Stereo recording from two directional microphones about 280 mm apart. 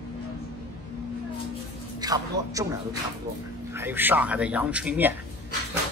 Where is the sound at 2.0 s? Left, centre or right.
Centre.